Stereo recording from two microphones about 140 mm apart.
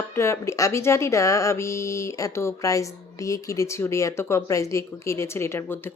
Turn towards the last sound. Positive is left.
turn(degrees=20)  # may be behind; listen again after turning